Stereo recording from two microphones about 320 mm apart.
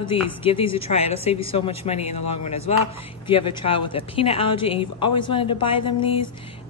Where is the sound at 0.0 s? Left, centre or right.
Centre.